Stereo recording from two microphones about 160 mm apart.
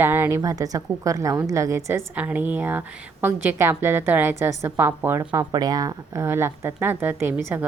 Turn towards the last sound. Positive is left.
turn(degrees=-10)  # may be behind; listen again after turning